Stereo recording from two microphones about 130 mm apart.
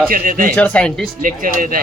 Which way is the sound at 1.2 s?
90° right.